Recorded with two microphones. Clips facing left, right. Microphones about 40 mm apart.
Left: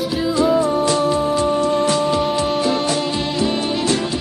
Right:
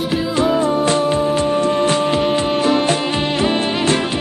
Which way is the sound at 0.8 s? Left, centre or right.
Right.